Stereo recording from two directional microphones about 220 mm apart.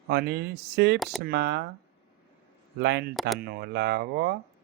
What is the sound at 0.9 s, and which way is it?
Speech, centre (ahead or behind).